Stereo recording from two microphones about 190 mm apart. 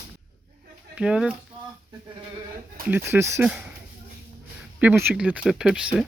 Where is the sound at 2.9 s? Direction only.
10° right (ahead or behind).